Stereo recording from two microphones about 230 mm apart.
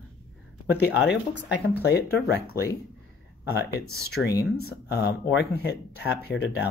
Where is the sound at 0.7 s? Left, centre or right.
Left.